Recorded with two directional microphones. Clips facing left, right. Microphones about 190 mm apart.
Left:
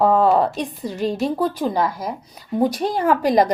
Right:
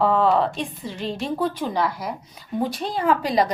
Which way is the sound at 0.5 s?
40° left (ahead or behind).